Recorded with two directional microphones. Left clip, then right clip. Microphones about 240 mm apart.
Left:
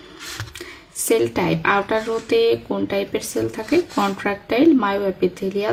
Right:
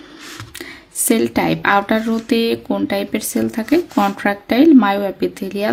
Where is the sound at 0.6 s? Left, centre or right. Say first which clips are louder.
Right 4 dB; right.